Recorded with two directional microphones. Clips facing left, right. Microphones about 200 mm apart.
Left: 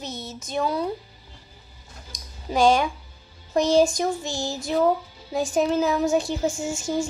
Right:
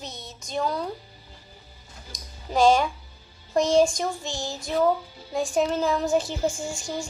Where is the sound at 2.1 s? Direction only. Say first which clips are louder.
Left 2 dB; centre (ahead or behind).